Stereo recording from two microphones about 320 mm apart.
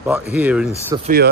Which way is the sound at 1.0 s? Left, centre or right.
Right.